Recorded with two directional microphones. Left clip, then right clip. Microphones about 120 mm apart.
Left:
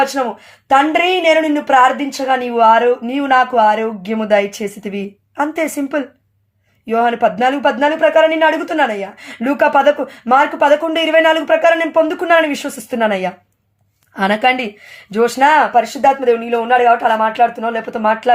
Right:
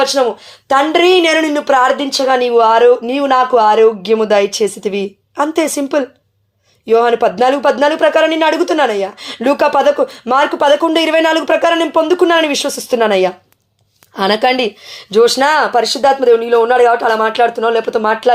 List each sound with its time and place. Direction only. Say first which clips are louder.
0.0 s speech: right 4 dB; 25° right (ahead or behind)
15.1 s speech: right 1 dB; 25° right (ahead or behind)